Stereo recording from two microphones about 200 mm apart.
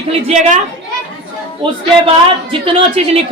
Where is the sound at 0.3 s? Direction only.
35° right (ahead or behind).